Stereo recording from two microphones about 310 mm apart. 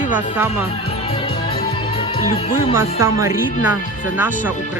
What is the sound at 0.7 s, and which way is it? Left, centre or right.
Music, centre.